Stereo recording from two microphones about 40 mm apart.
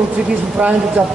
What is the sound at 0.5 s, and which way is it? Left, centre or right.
Speech, right.